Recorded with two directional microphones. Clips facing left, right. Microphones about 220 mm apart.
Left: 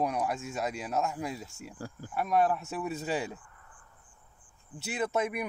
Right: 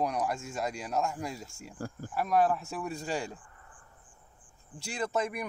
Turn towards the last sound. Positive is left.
turn(degrees=5)  # may be behind; listen again after turning